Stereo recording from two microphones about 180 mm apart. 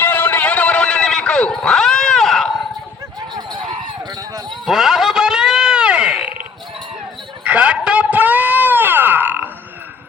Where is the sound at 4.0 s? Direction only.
20° right (ahead or behind).